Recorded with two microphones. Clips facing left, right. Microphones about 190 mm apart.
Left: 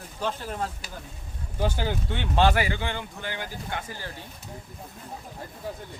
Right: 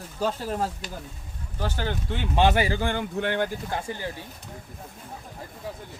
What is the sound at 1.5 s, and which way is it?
Speech, 15° left (ahead or behind).